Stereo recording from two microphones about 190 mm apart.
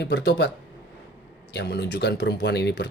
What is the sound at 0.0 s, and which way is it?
Speech, 65° left (ahead or behind).